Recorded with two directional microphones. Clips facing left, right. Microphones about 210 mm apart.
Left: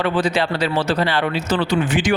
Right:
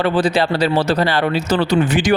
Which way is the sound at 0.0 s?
35° right (ahead or behind).